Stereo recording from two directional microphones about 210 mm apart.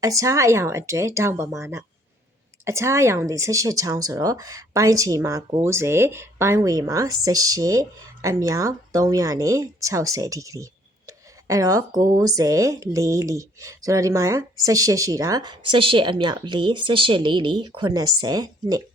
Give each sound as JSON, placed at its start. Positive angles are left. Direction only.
{"t": 0.0, "sound": "speech", "side_deg": -15}